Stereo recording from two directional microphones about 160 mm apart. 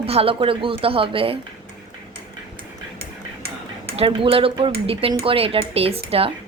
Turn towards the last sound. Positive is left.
turn(degrees=-35)  # may be behind; listen again after turning